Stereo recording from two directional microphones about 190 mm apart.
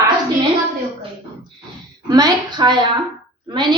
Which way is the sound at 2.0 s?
20° right (ahead or behind).